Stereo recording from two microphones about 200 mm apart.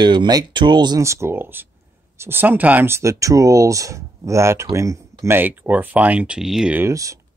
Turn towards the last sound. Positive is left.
turn(degrees=-15)  # may be behind; listen again after turning